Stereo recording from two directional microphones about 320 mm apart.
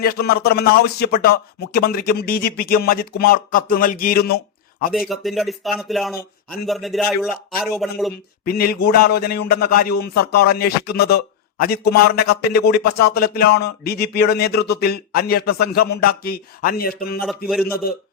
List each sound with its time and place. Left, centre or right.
0.0 s a man's voice: left
4.9 s speech: centre
8.4 s a man's voice: left
17.5 s speech: centre